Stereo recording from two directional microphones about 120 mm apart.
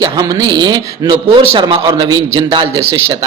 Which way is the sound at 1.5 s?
45° right (ahead or behind).